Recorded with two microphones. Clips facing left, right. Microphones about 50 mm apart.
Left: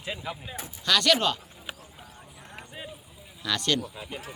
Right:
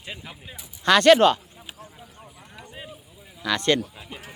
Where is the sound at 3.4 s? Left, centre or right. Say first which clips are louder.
Right 5 dB; right.